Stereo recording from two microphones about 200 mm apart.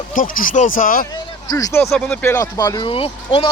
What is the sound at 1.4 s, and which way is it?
Speech, 15° left (ahead or behind).